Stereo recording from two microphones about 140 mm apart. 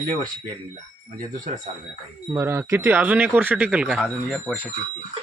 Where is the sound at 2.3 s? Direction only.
15° right (ahead or behind).